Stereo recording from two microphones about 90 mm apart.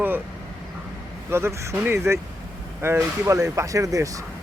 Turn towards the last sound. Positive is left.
turn(degrees=-40)  # may be behind; listen again after turning